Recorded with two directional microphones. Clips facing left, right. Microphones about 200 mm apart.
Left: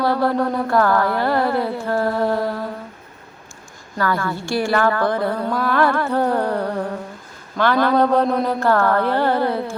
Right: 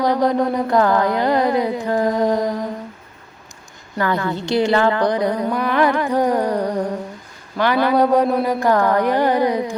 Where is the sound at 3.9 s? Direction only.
20° right (ahead or behind).